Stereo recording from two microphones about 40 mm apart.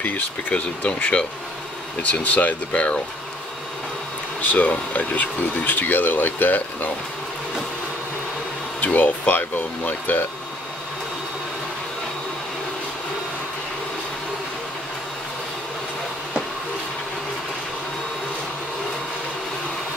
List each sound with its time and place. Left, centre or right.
0.0 s speech: left
0.8 s speech: left
2.3 s speech: left
4.4 s speech: left
8.8 s speech: left